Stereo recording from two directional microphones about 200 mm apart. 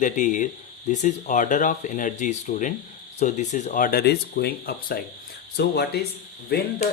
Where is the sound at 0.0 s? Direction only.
40° left (ahead or behind).